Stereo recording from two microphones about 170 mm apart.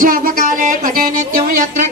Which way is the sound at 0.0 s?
55° right (ahead or behind).